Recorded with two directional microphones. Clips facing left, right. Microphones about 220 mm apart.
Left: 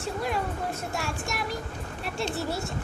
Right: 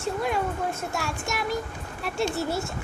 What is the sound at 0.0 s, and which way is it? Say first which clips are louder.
A child's voice: right 3 dB; centre (ahead or behind).